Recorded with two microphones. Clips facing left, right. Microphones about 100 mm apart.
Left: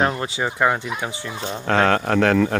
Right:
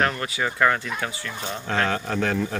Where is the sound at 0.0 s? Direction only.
20° left (ahead or behind).